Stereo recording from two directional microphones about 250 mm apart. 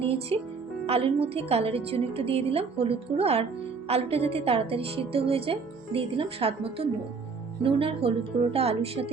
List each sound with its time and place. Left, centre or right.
0.0 s a woman's voice: right